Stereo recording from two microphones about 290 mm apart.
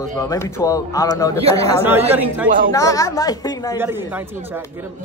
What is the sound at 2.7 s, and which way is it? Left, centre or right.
A man's voice, centre.